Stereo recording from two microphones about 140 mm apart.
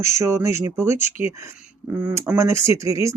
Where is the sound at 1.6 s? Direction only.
10° right (ahead or behind).